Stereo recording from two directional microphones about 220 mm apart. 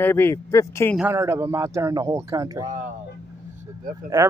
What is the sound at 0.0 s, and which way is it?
Speech, 10° left (ahead or behind).